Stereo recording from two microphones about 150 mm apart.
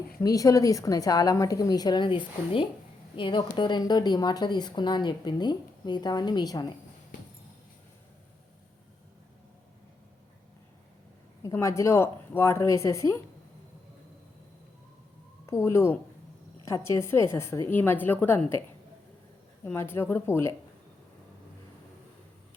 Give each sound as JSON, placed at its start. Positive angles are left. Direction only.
{"t": 0.2, "sound": "a woman's voice", "side_deg": 25}
{"t": 11.4, "sound": "a woman's voice", "side_deg": 20}
{"t": 15.4, "sound": "a woman's voice", "side_deg": 15}
{"t": 19.6, "sound": "a woman's voice", "side_deg": 15}